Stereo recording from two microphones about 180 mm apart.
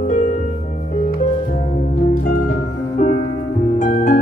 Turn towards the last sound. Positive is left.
turn(degrees=45)  # may be behind; listen again after turning